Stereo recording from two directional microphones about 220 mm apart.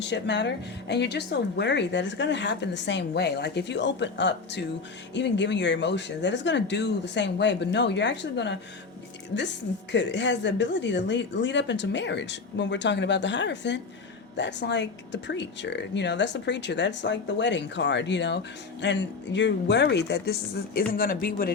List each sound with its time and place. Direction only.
0.0 s speech: 55° left (ahead or behind)
9.9 s speech: 55° left (ahead or behind)